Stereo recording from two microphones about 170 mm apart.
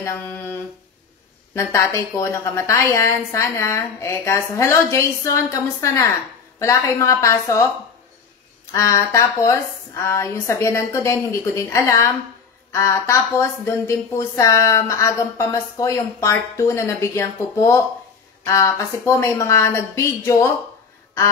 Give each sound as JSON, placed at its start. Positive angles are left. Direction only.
{"t": 0.0, "sound": "a woman's voice", "side_deg": 15}
{"t": 8.7, "sound": "a woman's voice", "side_deg": 20}